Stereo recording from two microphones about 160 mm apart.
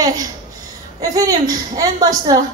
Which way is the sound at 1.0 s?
20° right (ahead or behind).